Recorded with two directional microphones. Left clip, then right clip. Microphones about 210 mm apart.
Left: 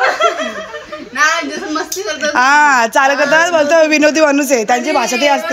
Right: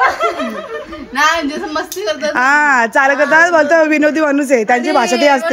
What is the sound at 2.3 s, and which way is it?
Speech, 15° right (ahead or behind).